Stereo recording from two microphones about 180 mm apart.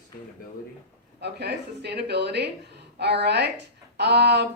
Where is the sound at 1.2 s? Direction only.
65° right (ahead or behind).